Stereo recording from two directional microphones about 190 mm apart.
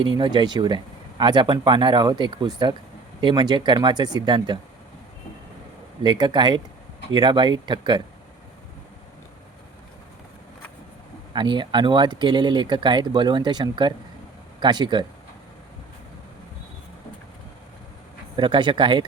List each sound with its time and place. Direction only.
0.2 s speech: 25° right (ahead or behind)
6.0 s speech: 25° right (ahead or behind)
11.3 s speech: 25° right (ahead or behind)
18.3 s speech: 25° right (ahead or behind)